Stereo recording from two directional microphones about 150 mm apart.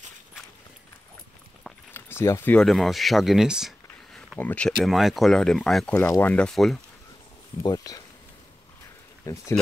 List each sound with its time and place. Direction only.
2.0 s speech: 15° left (ahead or behind)
2.6 s speech: centre (ahead or behind)
4.4 s speech: 10° left (ahead or behind)
7.6 s speech: 25° left (ahead or behind)
9.2 s speech: 20° left (ahead or behind)